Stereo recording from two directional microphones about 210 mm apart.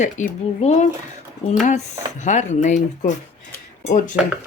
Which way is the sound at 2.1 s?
35° left (ahead or behind).